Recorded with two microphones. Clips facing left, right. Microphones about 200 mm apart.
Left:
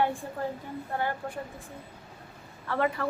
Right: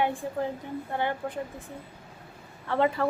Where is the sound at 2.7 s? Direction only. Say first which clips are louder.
Right 3 dB; 25° right (ahead or behind).